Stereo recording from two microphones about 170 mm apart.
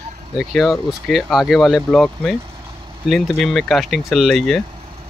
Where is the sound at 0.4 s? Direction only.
Centre (ahead or behind).